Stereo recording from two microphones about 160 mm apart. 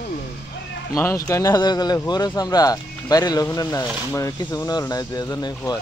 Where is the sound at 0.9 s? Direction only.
15° left (ahead or behind).